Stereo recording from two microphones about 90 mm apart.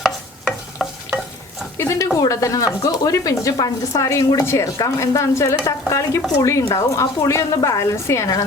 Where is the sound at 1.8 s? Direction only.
30° left (ahead or behind).